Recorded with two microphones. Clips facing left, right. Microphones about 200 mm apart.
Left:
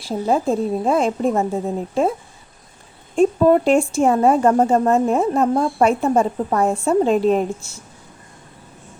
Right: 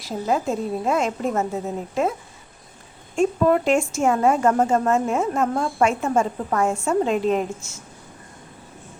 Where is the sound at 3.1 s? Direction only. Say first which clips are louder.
Left 4 dB; 35° left (ahead or behind).